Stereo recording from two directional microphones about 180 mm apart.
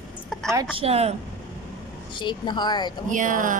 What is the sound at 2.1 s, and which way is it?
Speech, 25° left (ahead or behind).